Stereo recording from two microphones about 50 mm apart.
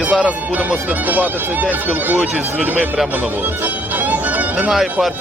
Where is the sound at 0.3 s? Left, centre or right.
Right.